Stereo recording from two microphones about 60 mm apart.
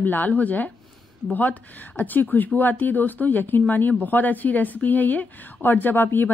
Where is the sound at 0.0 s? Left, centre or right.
Left.